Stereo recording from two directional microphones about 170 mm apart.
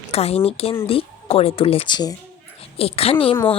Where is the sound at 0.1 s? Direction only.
35° left (ahead or behind).